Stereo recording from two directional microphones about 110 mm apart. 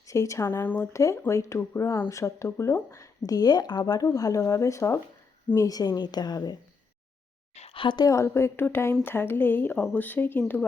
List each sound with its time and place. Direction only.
0.0 s a woman's voice: 30° left (ahead or behind)
7.5 s a sound: 80° left
7.8 s a woman's voice: 45° left (ahead or behind)
8.0 s speech: 25° left (ahead or behind)